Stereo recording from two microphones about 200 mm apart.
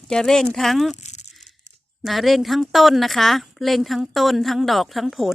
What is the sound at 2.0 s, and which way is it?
A woman's voice, centre (ahead or behind).